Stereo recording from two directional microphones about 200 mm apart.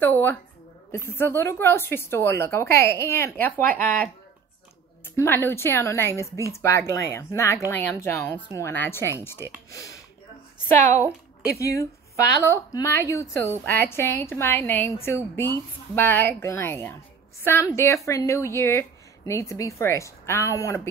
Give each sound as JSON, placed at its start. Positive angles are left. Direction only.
{"t": 0.0, "sound": "speech", "side_deg": 10}
{"t": 12.4, "sound": "speech", "side_deg": 10}